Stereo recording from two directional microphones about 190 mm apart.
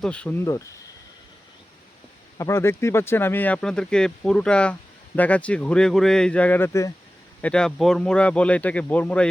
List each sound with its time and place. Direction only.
0.0 s speech: 5° left (ahead or behind)
2.4 s speech: 15° left (ahead or behind)